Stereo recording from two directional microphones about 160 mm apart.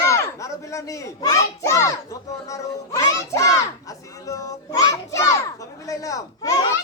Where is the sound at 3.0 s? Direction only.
20° left (ahead or behind).